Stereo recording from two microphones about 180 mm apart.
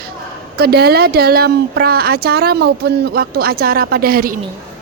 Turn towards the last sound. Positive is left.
turn(degrees=-55)  # may be behind; listen again after turning